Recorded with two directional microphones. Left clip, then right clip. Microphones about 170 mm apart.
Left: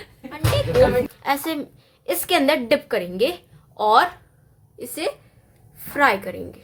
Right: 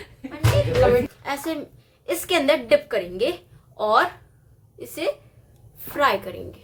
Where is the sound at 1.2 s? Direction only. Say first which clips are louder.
Left 4 dB; 35° left (ahead or behind).